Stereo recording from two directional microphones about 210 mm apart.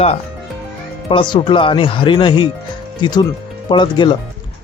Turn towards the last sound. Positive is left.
turn(degrees=20)  # may be behind; listen again after turning